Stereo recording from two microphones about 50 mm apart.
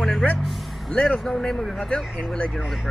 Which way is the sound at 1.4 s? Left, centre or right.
Centre.